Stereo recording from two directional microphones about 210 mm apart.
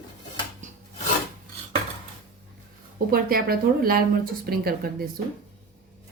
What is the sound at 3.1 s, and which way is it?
Speech, 45° right (ahead or behind).